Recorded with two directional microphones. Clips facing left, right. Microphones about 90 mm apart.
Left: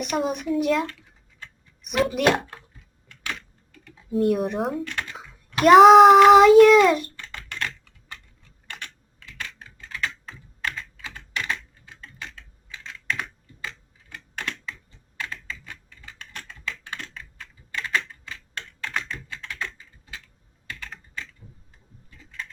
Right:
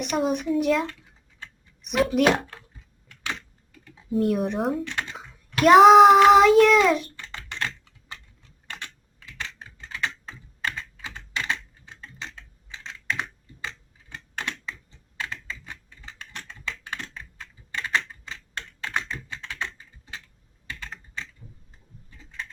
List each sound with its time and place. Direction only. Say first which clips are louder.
0.0 s a child's voice: right 1 dB; centre (ahead or behind)
3.7 s speech: right 1 dB; 5° right (ahead or behind)
4.9 s typing: right 1 dB; 20° right (ahead or behind)
5.6 s a child's voice: left 1 dB; centre (ahead or behind)
7.3 s typing: even; 20° right (ahead or behind)
8.7 s typing: even; 20° right (ahead or behind)
12.2 s computer keyboard: even; 25° right (ahead or behind)
15.2 s computer keyboard: even; 20° right (ahead or behind)
17.7 s typing: even; 25° right (ahead or behind)
18.8 s computer keyboard: right 1 dB; 20° right (ahead or behind)
20.7 s typing: right 1 dB; 25° right (ahead or behind)